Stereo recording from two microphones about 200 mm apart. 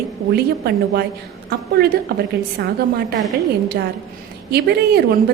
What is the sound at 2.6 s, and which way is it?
Speech, 65° right (ahead or behind).